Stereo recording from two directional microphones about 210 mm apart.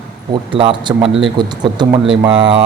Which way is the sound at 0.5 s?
25° right (ahead or behind).